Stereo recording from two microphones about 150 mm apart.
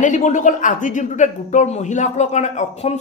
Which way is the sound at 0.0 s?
55° left (ahead or behind).